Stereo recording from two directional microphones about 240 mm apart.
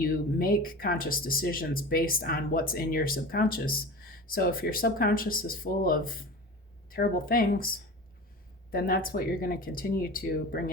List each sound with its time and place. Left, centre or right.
0.0 s speech: left